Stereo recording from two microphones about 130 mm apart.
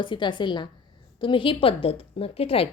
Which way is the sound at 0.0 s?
35° left (ahead or behind).